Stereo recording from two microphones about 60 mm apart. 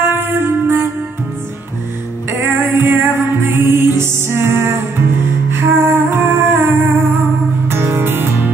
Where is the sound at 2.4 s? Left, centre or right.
Right.